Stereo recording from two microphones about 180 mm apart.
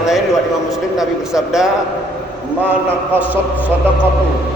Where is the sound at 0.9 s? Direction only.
5° right (ahead or behind).